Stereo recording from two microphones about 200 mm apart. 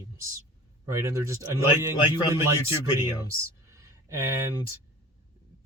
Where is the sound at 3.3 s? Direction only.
15° right (ahead or behind).